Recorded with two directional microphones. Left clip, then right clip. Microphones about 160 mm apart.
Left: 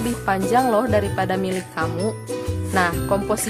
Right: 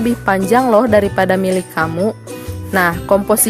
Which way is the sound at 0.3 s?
45° right (ahead or behind).